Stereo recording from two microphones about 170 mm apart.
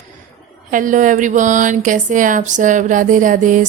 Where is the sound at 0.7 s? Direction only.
50° right (ahead or behind).